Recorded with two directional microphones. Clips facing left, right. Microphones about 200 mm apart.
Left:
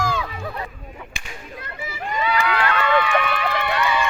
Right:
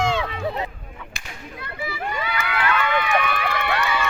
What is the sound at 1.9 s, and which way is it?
Run, 40° left (ahead or behind).